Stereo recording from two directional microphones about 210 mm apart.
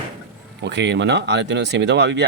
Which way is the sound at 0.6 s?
55° right (ahead or behind).